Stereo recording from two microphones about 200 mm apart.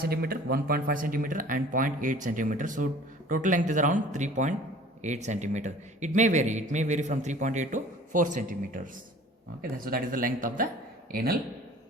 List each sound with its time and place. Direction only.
0.0 s speech: 50° right (ahead or behind)